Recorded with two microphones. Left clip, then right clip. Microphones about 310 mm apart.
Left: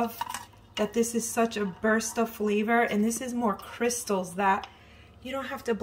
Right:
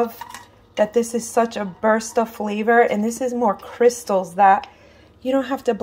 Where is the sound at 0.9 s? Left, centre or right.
Centre.